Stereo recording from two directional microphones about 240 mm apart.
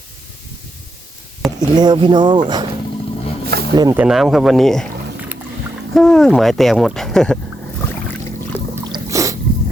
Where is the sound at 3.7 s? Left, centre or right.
Centre.